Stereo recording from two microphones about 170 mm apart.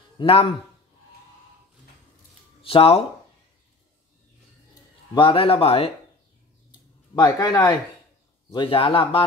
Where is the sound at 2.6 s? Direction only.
35° left (ahead or behind).